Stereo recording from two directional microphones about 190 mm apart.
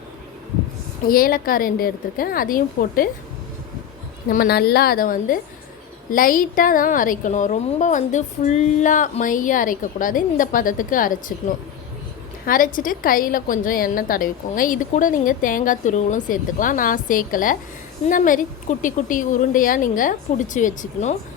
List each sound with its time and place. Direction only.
1.0 s a woman's voice: 50° left (ahead or behind)
4.3 s a woman's voice: 50° left (ahead or behind)